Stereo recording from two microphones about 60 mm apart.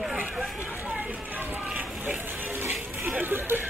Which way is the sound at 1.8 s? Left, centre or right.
Right.